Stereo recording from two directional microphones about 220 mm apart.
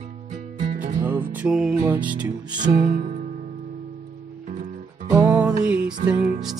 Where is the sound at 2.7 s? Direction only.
40° right (ahead or behind).